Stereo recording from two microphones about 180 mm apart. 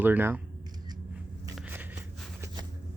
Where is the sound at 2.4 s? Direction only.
20° right (ahead or behind).